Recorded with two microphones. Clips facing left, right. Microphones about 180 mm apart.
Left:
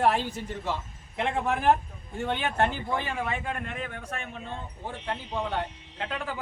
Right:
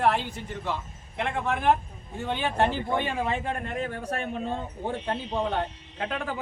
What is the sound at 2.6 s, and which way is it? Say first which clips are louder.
Speech: right 4 dB; 25° right (ahead or behind).